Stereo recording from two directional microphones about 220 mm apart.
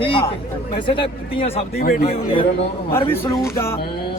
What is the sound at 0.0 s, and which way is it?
Speech, 25° left (ahead or behind).